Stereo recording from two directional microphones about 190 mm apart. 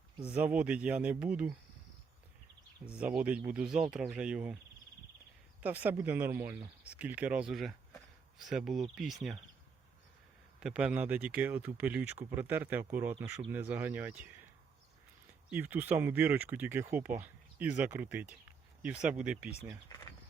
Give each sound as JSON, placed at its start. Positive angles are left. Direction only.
{"t": 0.2, "sound": "speech", "side_deg": -5}
{"t": 2.8, "sound": "speech", "side_deg": -5}
{"t": 5.5, "sound": "speech", "side_deg": -10}
{"t": 10.6, "sound": "speech", "side_deg": -5}
{"t": 15.4, "sound": "speech", "side_deg": -10}
{"t": 19.9, "sound": "a sound", "side_deg": 20}